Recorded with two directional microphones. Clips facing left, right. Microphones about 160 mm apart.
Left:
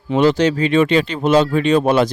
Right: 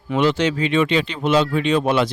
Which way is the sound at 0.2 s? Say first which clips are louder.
Left 4 dB; 40° left (ahead or behind).